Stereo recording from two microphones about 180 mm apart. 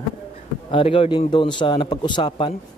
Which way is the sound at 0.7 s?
30° left (ahead or behind).